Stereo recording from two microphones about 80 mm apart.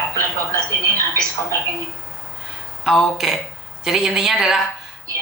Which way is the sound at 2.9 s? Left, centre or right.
Centre.